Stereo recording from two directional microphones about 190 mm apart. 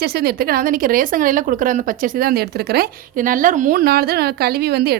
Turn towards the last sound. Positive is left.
turn(degrees=-55)  # may be behind; listen again after turning